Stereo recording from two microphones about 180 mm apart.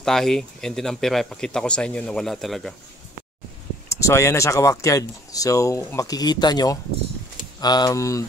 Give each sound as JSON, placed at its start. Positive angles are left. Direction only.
{"t": 0.0, "sound": "speech", "side_deg": 0}
{"t": 3.9, "sound": "speech", "side_deg": 15}